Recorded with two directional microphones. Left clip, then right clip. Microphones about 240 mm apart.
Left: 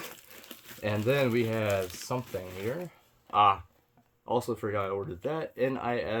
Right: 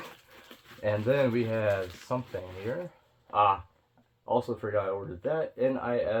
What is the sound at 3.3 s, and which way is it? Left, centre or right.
Speech, left.